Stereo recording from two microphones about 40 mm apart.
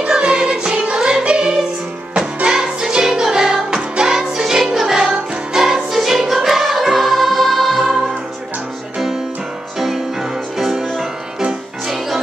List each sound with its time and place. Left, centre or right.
0.2 s music: right; by 8.0 s centre
10.6 s music: centre